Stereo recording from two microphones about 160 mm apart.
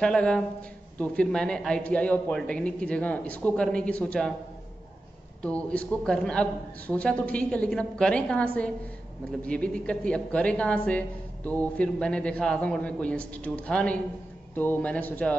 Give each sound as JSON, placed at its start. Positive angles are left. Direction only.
{"t": 0.0, "sound": "a man's voice", "side_deg": 5}
{"t": 5.4, "sound": "a woman's voice", "side_deg": 5}